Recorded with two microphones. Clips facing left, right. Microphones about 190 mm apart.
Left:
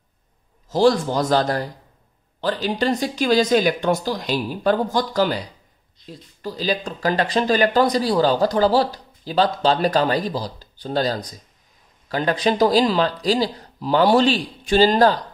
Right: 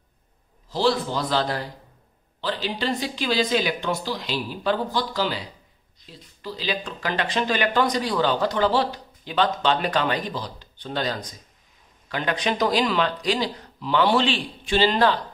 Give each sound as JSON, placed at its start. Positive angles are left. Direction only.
{"t": 0.7, "sound": "speech", "side_deg": 45}